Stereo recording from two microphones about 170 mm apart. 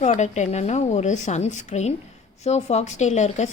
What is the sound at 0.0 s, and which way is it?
Speech, 45° left (ahead or behind).